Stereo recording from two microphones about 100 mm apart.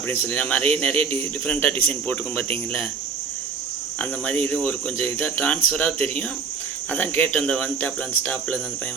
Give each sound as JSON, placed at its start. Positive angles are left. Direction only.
{"t": 0.3, "sound": "speech", "side_deg": 15}
{"t": 3.9, "sound": "speech", "side_deg": 15}